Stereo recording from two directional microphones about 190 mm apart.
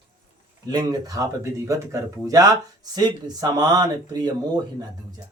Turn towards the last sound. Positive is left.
turn(degrees=-20)  # may be behind; listen again after turning